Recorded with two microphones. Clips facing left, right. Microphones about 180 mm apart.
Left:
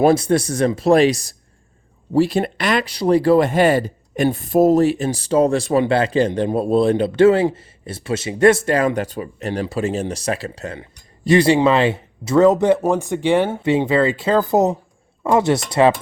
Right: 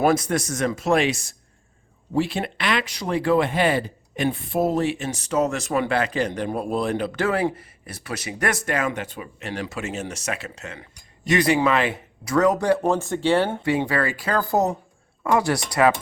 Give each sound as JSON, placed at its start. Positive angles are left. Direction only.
{"t": 0.0, "sound": "speech", "side_deg": 30}